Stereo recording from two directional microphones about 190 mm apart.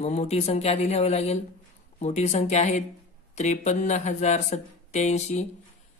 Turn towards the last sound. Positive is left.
turn(degrees=35)  # may be behind; listen again after turning